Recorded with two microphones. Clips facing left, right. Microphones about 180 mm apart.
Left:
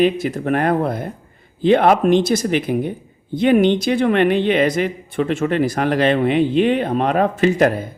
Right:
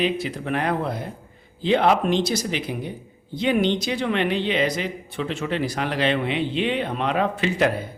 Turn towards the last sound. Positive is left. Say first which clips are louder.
# left 6 dB
turn(degrees=45)  # may be behind; listen again after turning